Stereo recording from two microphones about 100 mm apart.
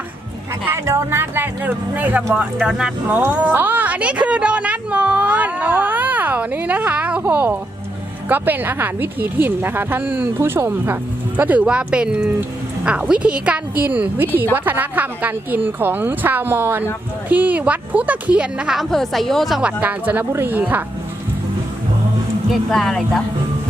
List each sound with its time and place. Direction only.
0.7 s a woman's voice: 25° right (ahead or behind)
18.8 s a woman's voice: centre (ahead or behind)
19.8 s a woman's voice: 15° right (ahead or behind)
22.7 s a woman's voice: 5° left (ahead or behind)